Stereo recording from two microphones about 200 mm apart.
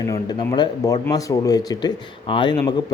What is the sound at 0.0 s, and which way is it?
Speech, 20° left (ahead or behind).